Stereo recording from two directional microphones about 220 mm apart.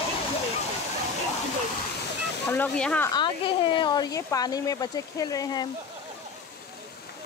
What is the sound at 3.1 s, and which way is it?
Speech, 20° left (ahead or behind).